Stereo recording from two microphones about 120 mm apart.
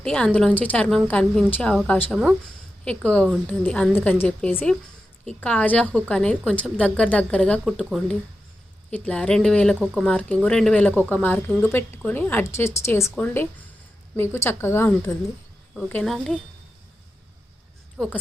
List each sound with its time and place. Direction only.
0.0 s a woman's voice: 10° left (ahead or behind)
1.7 s a woman's voice: 5° left (ahead or behind)
7.9 s speech: centre (ahead or behind)
8.9 s a woman's voice: 10° left (ahead or behind)
9.8 s speech: 5° right (ahead or behind)
10.1 s a woman's voice: 10° left (ahead or behind)
16.0 s speech: centre (ahead or behind)